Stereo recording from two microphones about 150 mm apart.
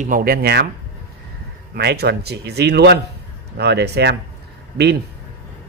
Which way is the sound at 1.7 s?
90° right.